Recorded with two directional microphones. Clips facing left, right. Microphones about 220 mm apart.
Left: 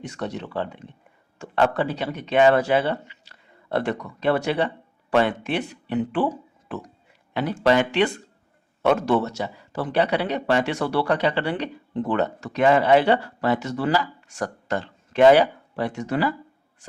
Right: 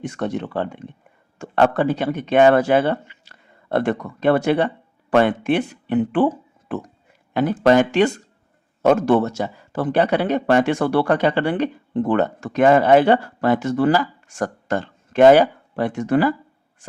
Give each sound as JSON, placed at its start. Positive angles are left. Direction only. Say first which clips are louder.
{"t": 0.0, "sound": "speech", "louder": "right 6 dB", "side_deg": -50}